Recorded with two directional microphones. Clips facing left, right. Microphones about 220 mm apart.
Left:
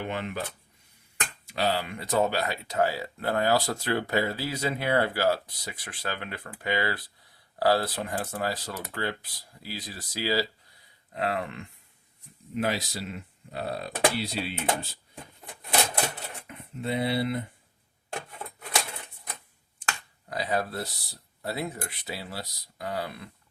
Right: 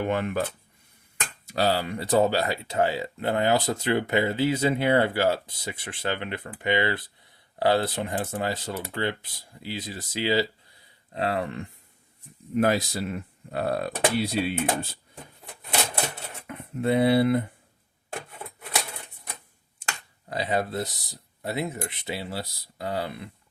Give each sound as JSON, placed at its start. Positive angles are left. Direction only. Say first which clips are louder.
{"t": 0.0, "sound": "speech", "louder": "right 6 dB", "side_deg": -50}
{"t": 1.5, "sound": "speech", "louder": "right 4 dB", "side_deg": -40}
{"t": 12.5, "sound": "speech", "louder": "right 6 dB", "side_deg": -50}
{"t": 16.5, "sound": "speech", "louder": "right 7 dB", "side_deg": -55}
{"t": 20.3, "sound": "speech", "louder": "right 3 dB", "side_deg": -25}